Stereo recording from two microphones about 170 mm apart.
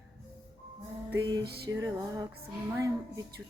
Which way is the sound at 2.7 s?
20° right (ahead or behind).